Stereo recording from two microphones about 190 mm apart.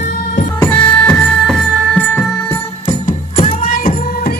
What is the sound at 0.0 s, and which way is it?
Music, 45° left (ahead or behind).